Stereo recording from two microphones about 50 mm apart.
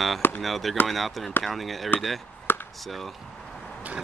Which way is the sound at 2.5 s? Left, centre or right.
Left.